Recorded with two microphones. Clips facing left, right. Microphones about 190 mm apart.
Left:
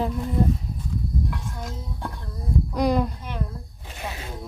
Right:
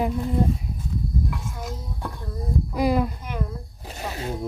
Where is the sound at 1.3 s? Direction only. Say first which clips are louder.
Right 1 dB; 5° right (ahead or behind).